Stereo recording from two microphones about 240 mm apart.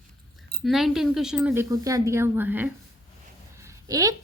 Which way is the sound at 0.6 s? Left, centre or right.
Centre.